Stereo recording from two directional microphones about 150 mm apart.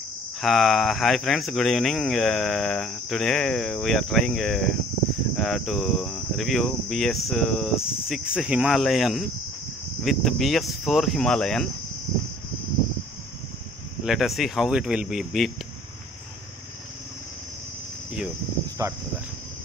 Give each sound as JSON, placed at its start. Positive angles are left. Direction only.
{"t": 0.4, "sound": "speech", "side_deg": 0}
{"t": 14.0, "sound": "speech", "side_deg": 0}
{"t": 18.8, "sound": "speech", "side_deg": -20}